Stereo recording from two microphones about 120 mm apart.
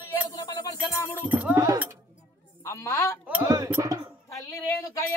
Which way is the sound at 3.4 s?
30° right (ahead or behind).